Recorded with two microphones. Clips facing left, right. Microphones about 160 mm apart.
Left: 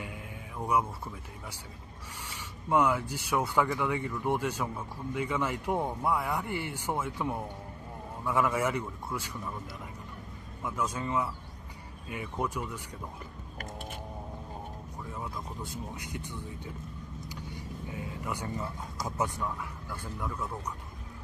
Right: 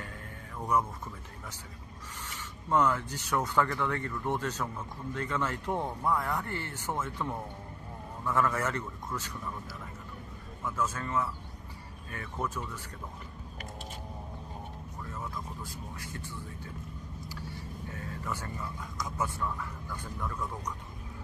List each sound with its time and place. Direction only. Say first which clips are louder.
0.0 s music: left 2 dB; 10° left (ahead or behind)
2.2 s speech: left 2 dB; 10° left (ahead or behind)
10.6 s speech: even; 15° left (ahead or behind)
15.0 s speech: left 1 dB; 15° left (ahead or behind)
17.8 s speech: left 1 dB; 15° left (ahead or behind)
18.8 s speech: left 2 dB; 30° left (ahead or behind)
19.2 s speech: left 1 dB; 15° left (ahead or behind)